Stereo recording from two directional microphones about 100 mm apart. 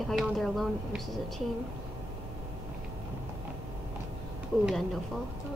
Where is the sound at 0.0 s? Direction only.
Centre (ahead or behind).